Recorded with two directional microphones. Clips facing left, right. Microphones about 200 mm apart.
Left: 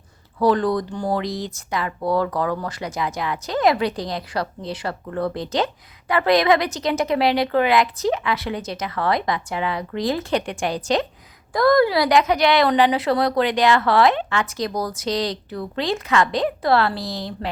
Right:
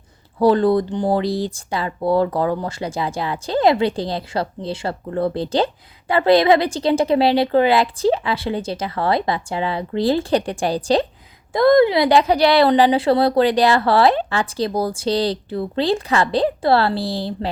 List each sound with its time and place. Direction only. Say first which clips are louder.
0.3 s speech: right 4 dB; 30° right (ahead or behind)